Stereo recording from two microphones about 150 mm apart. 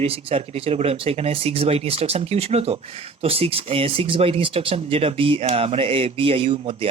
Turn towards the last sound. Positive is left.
turn(degrees=-35)  # may be behind; listen again after turning